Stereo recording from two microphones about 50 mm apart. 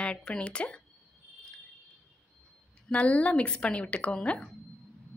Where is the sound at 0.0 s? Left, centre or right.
Centre.